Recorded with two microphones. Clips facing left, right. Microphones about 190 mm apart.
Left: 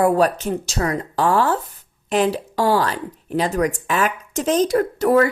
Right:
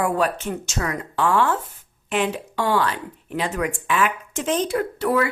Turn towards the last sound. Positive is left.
turn(degrees=40)  # may be behind; listen again after turning